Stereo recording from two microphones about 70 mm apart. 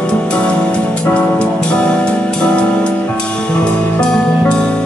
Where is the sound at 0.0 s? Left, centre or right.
Centre.